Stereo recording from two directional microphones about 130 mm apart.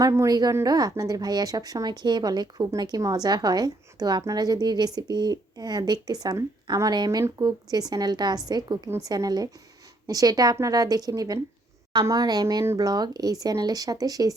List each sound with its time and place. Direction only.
0.0 s a woman's voice: 25° right (ahead or behind)